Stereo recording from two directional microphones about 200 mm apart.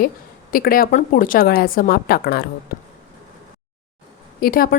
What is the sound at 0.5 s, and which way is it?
A woman's voice, 45° left (ahead or behind).